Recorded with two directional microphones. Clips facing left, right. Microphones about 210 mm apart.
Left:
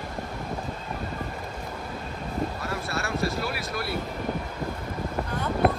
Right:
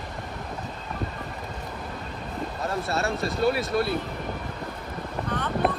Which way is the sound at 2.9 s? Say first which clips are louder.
Left 1 dB; 25° right (ahead or behind).